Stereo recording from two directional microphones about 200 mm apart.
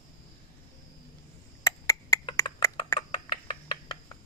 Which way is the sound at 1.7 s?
15° left (ahead or behind).